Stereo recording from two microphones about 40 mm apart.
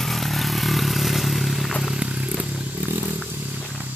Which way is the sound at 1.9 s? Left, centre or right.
Right.